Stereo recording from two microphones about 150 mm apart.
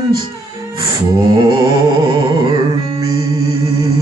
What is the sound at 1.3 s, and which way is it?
Music, 30° right (ahead or behind).